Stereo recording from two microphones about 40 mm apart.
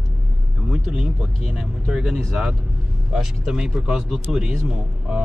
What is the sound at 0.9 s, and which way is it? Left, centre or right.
Speech, centre.